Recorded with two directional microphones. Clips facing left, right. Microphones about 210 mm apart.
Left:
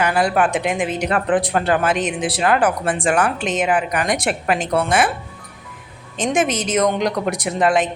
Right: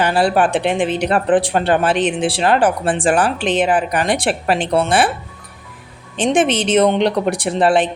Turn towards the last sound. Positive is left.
turn(degrees=-30)  # may be behind; listen again after turning